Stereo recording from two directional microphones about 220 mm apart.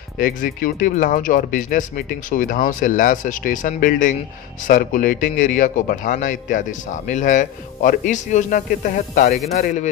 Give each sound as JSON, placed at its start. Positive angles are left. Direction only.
{"t": 0.2, "sound": "a man's voice", "side_deg": 40}